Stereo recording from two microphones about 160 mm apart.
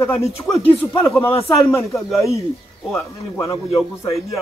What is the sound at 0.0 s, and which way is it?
Speech, 15° left (ahead or behind).